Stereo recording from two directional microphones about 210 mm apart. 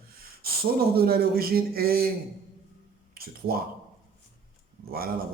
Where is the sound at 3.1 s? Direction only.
45° right (ahead or behind).